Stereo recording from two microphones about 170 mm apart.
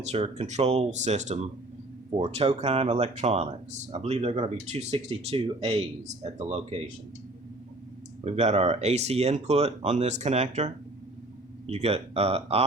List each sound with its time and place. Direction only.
0.1 s speech: 40° right (ahead or behind)
8.2 s speech: 40° right (ahead or behind)